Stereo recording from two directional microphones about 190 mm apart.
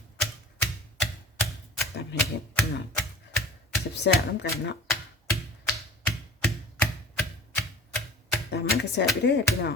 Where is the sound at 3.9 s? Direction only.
65° left (ahead or behind).